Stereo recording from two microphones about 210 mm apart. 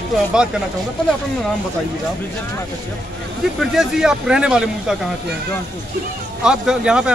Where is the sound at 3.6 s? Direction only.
Centre (ahead or behind).